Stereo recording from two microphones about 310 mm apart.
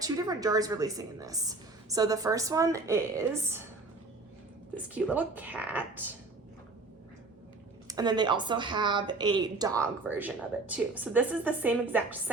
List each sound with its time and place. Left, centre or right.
0.0 s a woman's voice: centre
4.7 s speech: centre
7.9 s a woman's voice: centre